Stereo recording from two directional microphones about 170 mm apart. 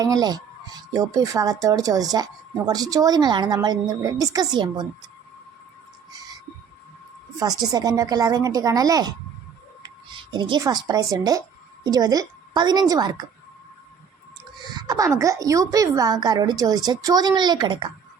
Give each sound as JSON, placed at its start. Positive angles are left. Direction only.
{"t": 0.0, "sound": "a woman's voice", "side_deg": -20}
{"t": 7.3, "sound": "a woman's voice", "side_deg": -20}
{"t": 14.7, "sound": "a woman's voice", "side_deg": -25}